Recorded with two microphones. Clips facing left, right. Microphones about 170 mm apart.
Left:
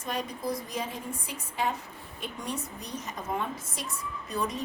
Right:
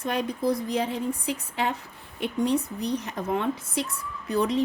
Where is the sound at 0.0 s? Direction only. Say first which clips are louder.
Right 7 dB; 60° right (ahead or behind).